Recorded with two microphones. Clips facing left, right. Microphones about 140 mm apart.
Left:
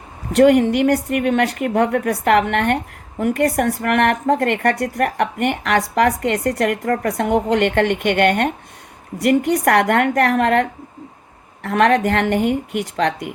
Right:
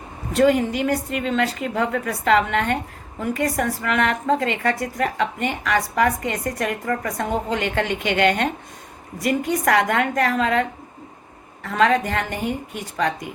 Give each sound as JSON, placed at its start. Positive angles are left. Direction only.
{"t": 0.3, "sound": "a woman's voice", "side_deg": 65}
{"t": 9.2, "sound": "a woman's voice", "side_deg": 65}